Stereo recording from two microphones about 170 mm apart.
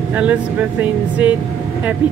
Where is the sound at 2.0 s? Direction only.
25° left (ahead or behind).